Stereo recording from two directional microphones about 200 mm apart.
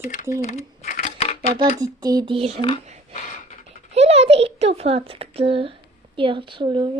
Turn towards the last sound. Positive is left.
turn(degrees=-25)  # may be behind; listen again after turning